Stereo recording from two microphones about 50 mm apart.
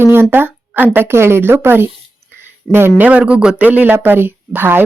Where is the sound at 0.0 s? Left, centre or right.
Right.